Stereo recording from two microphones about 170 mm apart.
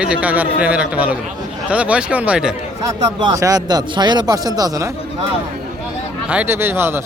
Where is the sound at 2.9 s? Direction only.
20° right (ahead or behind).